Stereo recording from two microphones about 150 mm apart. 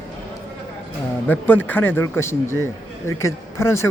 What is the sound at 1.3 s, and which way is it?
Speech, 10° left (ahead or behind).